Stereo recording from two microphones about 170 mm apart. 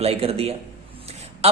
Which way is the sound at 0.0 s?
35° right (ahead or behind).